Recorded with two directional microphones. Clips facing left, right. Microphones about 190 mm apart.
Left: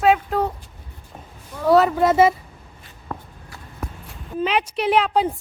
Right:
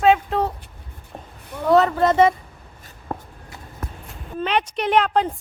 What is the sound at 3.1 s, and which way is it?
Writing, 30° right (ahead or behind).